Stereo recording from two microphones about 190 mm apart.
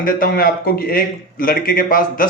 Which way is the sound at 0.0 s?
50° left (ahead or behind).